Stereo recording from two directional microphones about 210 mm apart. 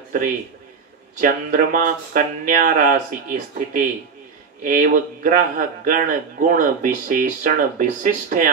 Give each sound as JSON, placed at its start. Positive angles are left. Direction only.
{"t": 1.2, "sound": "a man's voice", "side_deg": -40}